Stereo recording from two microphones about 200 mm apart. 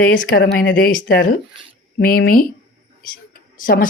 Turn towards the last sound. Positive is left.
turn(degrees=45)  # may be behind; listen again after turning